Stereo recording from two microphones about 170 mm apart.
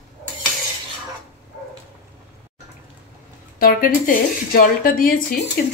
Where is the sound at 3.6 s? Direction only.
60° left (ahead or behind).